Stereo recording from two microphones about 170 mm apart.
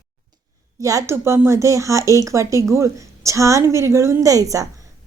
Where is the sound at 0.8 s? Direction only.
20° right (ahead or behind).